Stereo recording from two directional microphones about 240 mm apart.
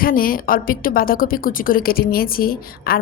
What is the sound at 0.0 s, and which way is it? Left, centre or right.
A woman's voice, left.